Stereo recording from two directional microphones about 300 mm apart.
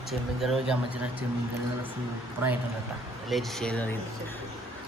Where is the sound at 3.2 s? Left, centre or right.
Centre.